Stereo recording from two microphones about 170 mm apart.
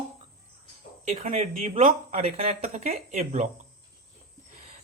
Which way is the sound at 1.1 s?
40° right (ahead or behind).